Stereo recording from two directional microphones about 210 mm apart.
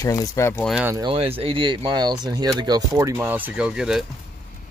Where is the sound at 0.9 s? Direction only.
25° right (ahead or behind); by 4.0 s 5° right (ahead or behind).